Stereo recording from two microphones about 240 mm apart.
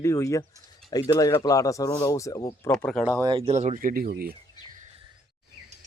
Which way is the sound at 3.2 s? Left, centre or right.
Right.